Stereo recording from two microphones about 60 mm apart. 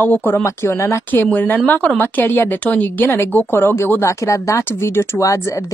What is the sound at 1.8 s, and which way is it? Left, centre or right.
Speech, left.